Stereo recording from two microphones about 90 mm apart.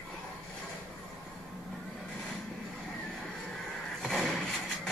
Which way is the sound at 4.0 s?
5° left (ahead or behind).